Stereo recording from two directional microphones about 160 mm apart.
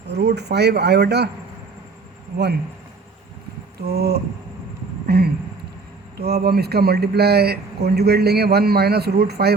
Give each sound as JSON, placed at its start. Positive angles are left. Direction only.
{"t": 0.1, "sound": "speech", "side_deg": -90}
{"t": 3.8, "sound": "speech", "side_deg": -80}